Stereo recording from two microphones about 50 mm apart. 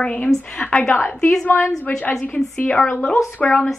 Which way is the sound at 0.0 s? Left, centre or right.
Left.